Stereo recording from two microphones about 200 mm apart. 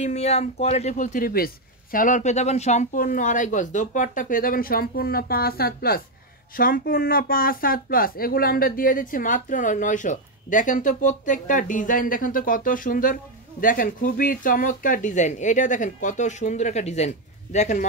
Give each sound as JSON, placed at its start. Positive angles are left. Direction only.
{"t": 0.0, "sound": "speech", "side_deg": 35}